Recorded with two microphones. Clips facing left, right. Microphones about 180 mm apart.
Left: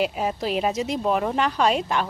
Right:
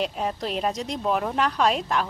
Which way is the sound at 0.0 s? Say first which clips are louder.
Left 3 dB; 5° left (ahead or behind).